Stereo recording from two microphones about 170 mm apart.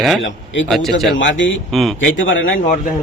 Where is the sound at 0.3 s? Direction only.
90° left.